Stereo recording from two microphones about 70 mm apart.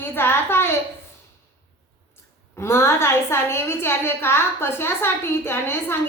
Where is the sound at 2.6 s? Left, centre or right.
Left.